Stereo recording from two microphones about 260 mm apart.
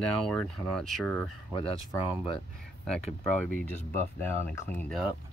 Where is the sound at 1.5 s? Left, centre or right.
Centre.